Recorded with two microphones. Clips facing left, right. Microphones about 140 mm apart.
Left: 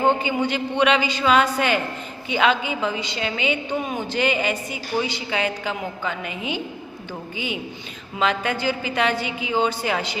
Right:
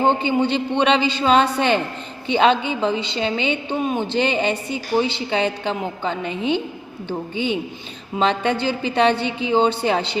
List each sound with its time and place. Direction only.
0.3 s a woman's voice: 30° right (ahead or behind)
8.2 s a woman's voice: 30° right (ahead or behind)